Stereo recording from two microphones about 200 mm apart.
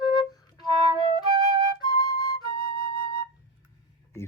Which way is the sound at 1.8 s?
20° left (ahead or behind).